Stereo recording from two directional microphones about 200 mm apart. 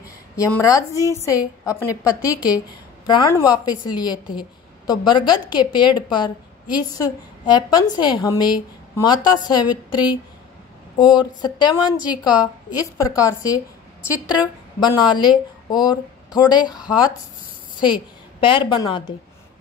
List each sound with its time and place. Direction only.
0.4 s a woman's voice: 15° left (ahead or behind)
14.8 s a woman's voice: 20° left (ahead or behind)